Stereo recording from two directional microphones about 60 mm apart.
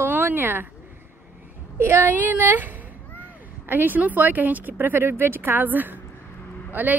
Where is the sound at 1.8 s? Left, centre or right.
Right.